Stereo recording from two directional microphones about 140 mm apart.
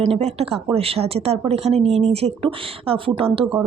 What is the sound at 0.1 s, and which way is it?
A woman's voice, 45° right (ahead or behind).